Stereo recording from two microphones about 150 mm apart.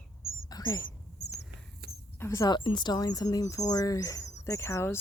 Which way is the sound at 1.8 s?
90° right.